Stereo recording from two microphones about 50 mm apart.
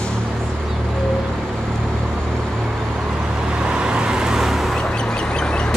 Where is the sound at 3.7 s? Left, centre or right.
Centre.